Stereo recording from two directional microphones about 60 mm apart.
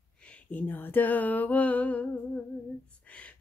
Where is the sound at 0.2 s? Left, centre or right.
Left.